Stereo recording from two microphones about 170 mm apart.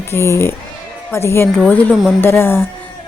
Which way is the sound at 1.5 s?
5° left (ahead or behind).